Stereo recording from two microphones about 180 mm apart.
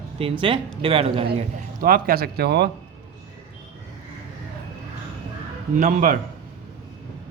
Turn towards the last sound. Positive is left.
turn(degrees=-50)  # may be behind; listen again after turning